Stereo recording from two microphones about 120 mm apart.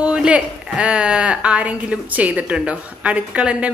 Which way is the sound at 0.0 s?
10° right (ahead or behind).